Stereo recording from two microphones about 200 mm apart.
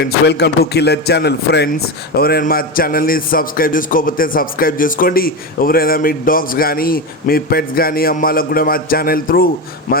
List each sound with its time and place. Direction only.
0.3 s a man's voice: 55° left (ahead or behind)